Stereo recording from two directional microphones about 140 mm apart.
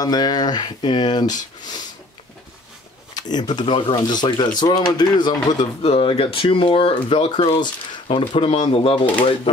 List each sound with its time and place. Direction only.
0.0 s speech: 30° left (ahead or behind)
3.2 s speech: 30° left (ahead or behind)
5.6 s speech: 45° left (ahead or behind)